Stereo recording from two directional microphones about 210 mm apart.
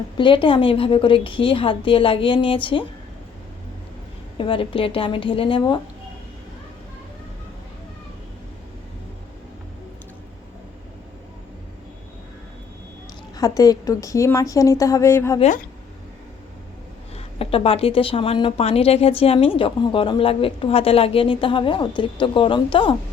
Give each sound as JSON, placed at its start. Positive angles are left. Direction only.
{"t": 0.2, "sound": "speech", "side_deg": 25}
{"t": 4.4, "sound": "speech", "side_deg": 25}
{"t": 13.3, "sound": "a woman's voice", "side_deg": 15}
{"t": 15.4, "sound": "speech", "side_deg": 35}
{"t": 17.2, "sound": "speech", "side_deg": 25}